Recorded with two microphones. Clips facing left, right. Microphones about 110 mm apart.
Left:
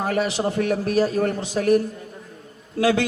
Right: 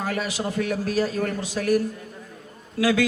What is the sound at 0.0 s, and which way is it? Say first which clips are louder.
A man's voice: left 5 dB; 30° left (ahead or behind).